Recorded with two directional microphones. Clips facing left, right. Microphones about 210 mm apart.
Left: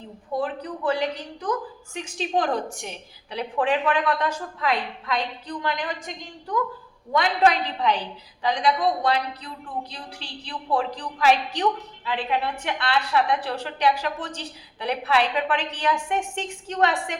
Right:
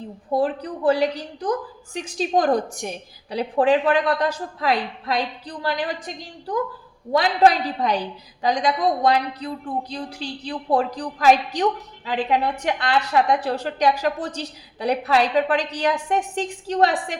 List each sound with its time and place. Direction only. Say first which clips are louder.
0.3 s a woman's voice: right 5 dB; 35° right (ahead or behind)